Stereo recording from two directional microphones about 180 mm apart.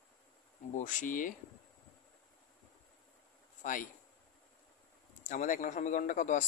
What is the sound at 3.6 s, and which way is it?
Speech, 45° left (ahead or behind).